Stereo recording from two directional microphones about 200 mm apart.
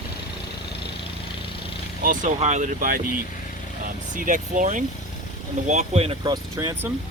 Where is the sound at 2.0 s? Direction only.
40° right (ahead or behind).